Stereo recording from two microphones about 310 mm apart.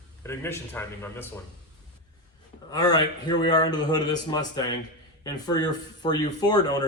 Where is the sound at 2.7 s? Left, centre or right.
Centre.